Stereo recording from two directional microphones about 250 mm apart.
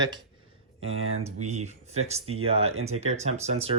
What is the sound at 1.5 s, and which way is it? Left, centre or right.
Speech, right.